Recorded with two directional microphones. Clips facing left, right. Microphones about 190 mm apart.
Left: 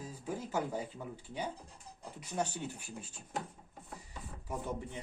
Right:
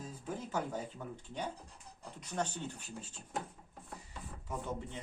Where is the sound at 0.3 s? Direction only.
10° left (ahead or behind).